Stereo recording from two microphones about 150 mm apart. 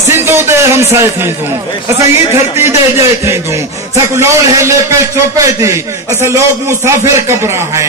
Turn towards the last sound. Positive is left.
turn(degrees=-20)  # may be behind; listen again after turning